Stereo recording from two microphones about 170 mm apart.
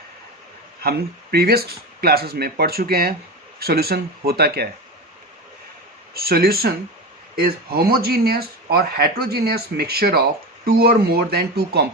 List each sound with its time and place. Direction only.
0.8 s speech: 65° right (ahead or behind)
6.1 s speech: 65° right (ahead or behind)